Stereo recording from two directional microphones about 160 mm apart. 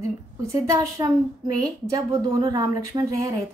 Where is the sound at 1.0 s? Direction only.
25° right (ahead or behind).